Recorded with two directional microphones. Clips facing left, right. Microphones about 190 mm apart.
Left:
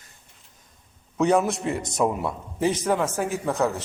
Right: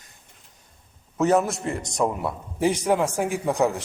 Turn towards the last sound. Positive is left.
turn(degrees=-15)  # may be behind; listen again after turning